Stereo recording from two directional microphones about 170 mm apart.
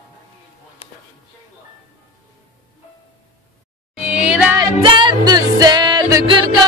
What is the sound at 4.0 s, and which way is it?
Music, 5° right (ahead or behind).